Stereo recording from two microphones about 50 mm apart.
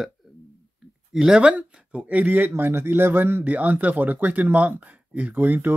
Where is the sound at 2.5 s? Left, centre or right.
Right.